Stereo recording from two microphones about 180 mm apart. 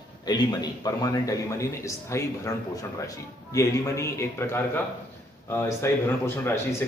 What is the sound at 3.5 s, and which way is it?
A man's voice, 15° left (ahead or behind).